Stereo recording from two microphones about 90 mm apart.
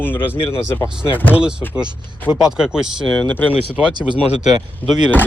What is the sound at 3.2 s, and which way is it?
Speech, 15° left (ahead or behind).